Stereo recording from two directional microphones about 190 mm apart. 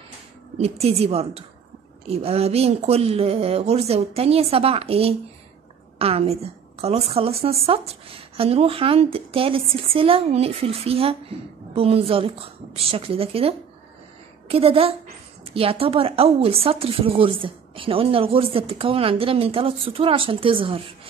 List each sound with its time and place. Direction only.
0.6 s a woman's voice: 35° right (ahead or behind)